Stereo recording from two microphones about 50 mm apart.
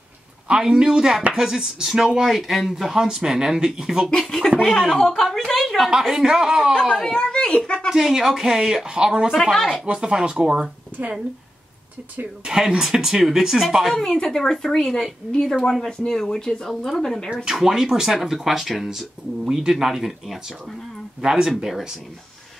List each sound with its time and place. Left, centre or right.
0.5 s speech: centre
4.1 s a woman's voice: centre
6.7 s a woman's voice: centre
7.9 s speech: centre
9.3 s speech: centre
9.8 s speech: centre
12.4 s a woman's voice: centre
17.5 s speech: centre
21.2 s speech: centre